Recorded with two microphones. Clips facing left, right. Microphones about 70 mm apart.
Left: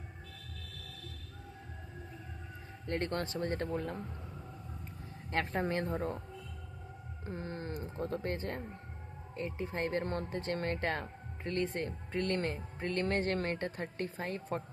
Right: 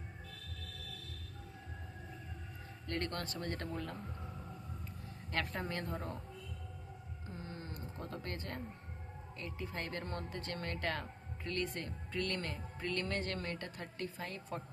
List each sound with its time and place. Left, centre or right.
2.8 s speech: left
5.3 s speech: left
7.3 s a sound: left
7.9 s speech: left